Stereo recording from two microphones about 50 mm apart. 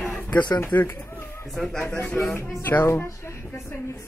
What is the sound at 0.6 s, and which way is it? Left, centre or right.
Speech, left.